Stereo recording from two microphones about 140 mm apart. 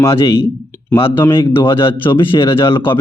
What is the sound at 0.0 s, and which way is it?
Speech, 20° left (ahead or behind).